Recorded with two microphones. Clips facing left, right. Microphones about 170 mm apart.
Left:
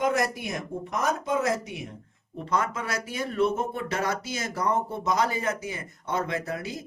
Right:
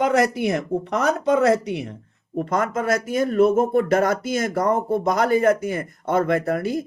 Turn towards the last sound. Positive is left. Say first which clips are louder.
# right 10 dB
turn(degrees=-55)  # may be behind; listen again after turning